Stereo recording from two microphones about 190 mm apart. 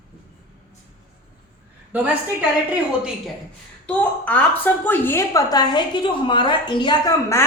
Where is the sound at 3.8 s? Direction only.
10° left (ahead or behind).